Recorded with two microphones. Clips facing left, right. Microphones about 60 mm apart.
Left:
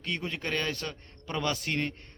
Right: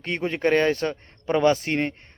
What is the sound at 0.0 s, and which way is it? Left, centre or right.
A man's voice, right.